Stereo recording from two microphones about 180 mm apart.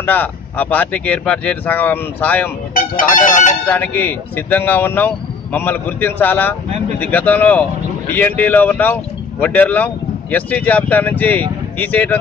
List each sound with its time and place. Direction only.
0.0 s speech: 10° left (ahead or behind)
2.7 s speech: 50° left (ahead or behind)
3.6 s speech: 10° left (ahead or behind)